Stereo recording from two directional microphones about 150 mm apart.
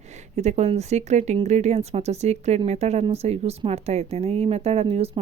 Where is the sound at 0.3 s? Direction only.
45° right (ahead or behind).